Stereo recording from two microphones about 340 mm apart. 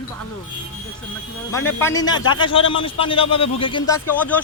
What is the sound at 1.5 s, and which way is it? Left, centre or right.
A man's voice, centre.